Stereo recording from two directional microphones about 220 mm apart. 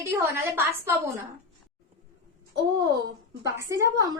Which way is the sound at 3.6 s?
15° right (ahead or behind).